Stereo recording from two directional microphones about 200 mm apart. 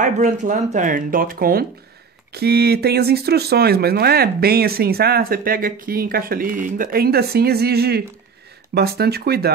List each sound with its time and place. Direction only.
0.0 s speech: 40° right (ahead or behind)